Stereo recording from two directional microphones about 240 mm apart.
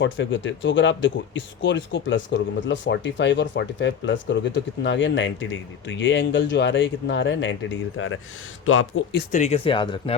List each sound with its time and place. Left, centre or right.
0.0 s speech: left
9.3 s speech: left